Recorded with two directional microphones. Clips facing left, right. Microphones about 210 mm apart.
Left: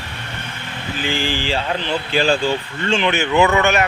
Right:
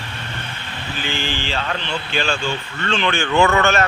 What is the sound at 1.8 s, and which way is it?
Speech, 35° left (ahead or behind).